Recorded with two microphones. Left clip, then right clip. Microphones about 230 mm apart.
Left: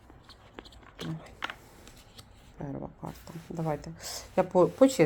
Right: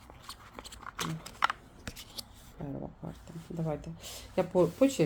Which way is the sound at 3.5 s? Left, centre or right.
Left.